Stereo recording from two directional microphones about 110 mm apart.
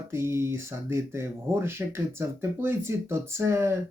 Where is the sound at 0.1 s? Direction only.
25° right (ahead or behind).